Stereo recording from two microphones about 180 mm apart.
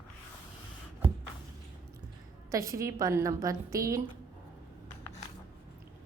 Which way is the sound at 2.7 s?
20° right (ahead or behind).